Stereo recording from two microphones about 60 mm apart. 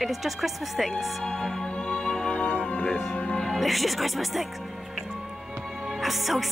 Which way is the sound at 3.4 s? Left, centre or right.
Centre.